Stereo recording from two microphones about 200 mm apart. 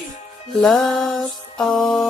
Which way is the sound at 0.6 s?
Centre (ahead or behind).